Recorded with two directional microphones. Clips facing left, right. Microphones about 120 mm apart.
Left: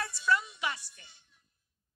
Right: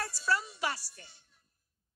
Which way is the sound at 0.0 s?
40° right (ahead or behind).